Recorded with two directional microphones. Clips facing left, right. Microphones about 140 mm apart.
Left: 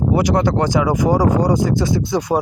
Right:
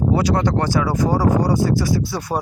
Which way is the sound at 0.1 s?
15° left (ahead or behind).